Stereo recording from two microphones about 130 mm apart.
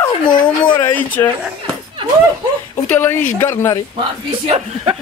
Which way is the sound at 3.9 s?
40° right (ahead or behind).